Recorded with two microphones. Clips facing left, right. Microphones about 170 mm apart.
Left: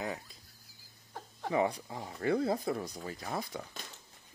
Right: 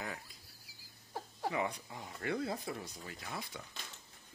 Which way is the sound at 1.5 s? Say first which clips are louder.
Left 8 dB; 35° left (ahead or behind).